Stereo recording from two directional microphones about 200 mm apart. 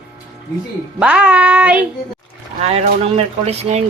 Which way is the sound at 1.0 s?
5° right (ahead or behind).